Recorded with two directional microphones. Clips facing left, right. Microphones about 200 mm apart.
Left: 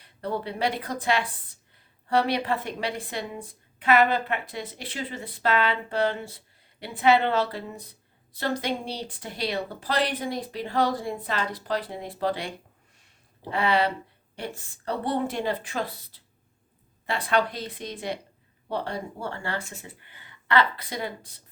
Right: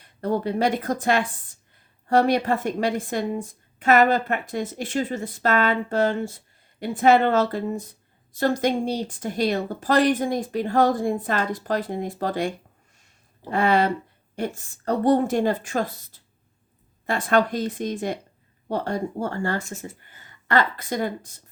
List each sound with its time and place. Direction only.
0.0 s a woman's voice: 45° right (ahead or behind)